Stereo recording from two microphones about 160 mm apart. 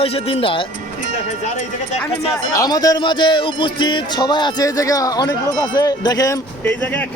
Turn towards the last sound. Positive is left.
turn(degrees=10)  # may be behind; listen again after turning